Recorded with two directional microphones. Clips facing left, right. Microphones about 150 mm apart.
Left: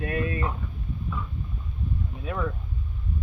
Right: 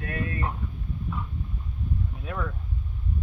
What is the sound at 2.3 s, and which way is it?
Speech, centre (ahead or behind).